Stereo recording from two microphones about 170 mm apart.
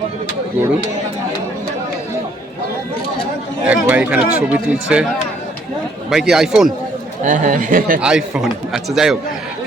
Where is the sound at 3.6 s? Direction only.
10° right (ahead or behind).